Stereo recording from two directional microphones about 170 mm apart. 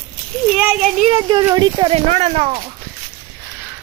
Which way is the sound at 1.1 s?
25° right (ahead or behind).